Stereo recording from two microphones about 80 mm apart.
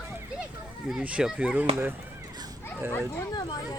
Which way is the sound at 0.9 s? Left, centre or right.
Centre.